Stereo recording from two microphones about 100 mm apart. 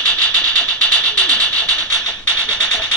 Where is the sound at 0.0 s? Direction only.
15° left (ahead or behind).